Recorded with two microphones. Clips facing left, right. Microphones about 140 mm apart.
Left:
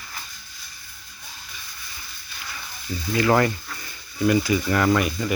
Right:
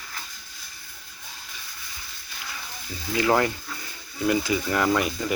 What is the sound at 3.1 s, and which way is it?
Speech, 10° right (ahead or behind).